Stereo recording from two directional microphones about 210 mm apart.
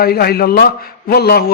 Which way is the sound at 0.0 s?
45° left (ahead or behind).